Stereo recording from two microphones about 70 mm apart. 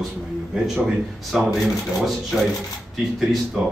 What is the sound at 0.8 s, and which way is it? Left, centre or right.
Speech, centre.